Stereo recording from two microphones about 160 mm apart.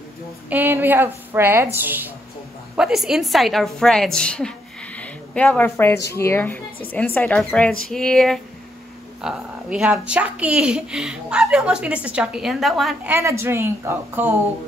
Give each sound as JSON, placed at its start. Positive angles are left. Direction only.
{"t": 0.5, "sound": "a woman's voice", "side_deg": -10}
{"t": 13.1, "sound": "a woman's voice", "side_deg": -15}